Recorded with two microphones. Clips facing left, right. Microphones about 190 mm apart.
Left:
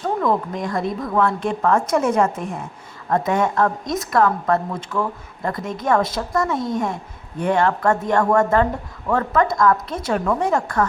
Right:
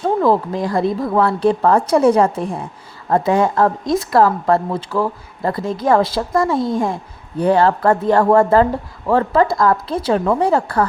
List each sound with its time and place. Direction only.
0.0 s a woman's voice: 30° right (ahead or behind)